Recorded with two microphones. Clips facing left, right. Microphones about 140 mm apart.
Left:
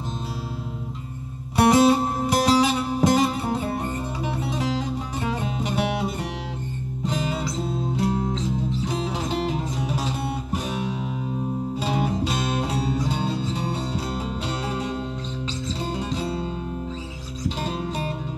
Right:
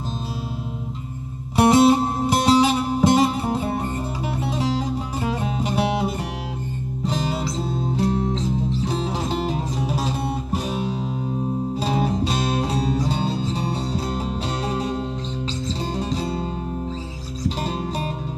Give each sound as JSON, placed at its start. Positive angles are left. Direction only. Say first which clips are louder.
{"t": 1.6, "sound": "music", "louder": "right 2 dB", "side_deg": -25}
{"t": 9.9, "sound": "music", "louder": "right 2 dB", "side_deg": -35}
{"t": 17.6, "sound": "music", "louder": "right 2 dB", "side_deg": -35}